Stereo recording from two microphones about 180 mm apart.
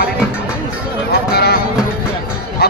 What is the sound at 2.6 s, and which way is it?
Bow-wow, 65° left (ahead or behind).